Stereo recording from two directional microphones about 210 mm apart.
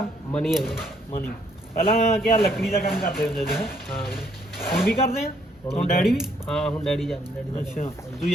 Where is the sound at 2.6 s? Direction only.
Centre (ahead or behind).